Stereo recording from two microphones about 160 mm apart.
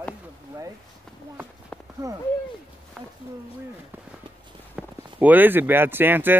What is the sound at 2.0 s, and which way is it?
Speech, 20° right (ahead or behind).